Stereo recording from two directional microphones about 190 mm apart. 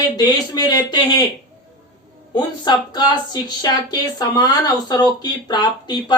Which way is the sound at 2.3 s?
20° left (ahead or behind).